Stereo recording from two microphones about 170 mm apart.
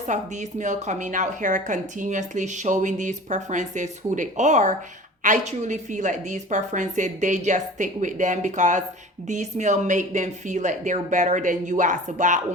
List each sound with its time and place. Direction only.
0.1 s a woman's voice: 45° right (ahead or behind)